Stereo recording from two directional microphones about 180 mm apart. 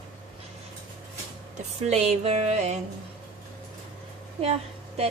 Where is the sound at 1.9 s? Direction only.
35° right (ahead or behind).